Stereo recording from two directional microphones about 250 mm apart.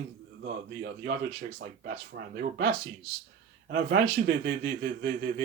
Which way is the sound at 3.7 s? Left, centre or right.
Right.